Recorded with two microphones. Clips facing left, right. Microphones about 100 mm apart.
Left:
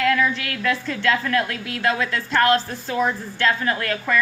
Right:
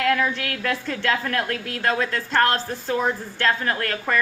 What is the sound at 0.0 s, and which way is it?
A woman's voice, 50° right (ahead or behind).